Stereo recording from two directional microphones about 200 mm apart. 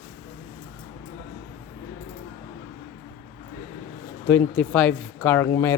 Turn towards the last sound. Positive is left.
turn(degrees=15)  # may be behind; listen again after turning